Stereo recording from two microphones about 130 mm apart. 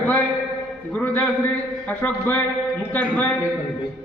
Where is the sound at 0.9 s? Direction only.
15° left (ahead or behind).